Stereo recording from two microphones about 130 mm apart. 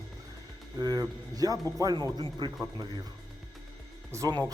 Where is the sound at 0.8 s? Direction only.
30° right (ahead or behind).